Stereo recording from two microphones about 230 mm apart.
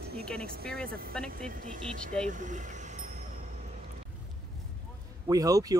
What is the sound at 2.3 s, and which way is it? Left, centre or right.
Speech, right.